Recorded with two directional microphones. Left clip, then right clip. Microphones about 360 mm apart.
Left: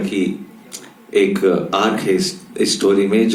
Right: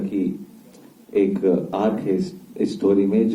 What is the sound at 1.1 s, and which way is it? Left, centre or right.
Speech, left.